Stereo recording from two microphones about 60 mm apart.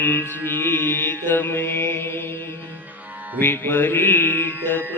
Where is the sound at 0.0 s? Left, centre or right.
Left.